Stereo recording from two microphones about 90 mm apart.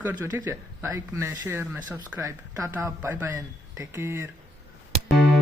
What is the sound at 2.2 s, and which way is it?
Speech, 35° right (ahead or behind).